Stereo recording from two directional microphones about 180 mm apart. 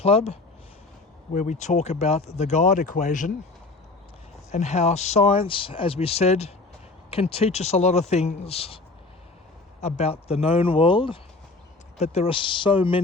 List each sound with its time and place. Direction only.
0.0 s speech: 35° left (ahead or behind)
4.5 s speech: 40° left (ahead or behind)
9.8 s speech: 35° left (ahead or behind)